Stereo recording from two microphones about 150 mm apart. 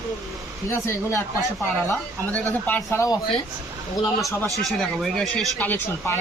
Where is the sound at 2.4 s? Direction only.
10° left (ahead or behind).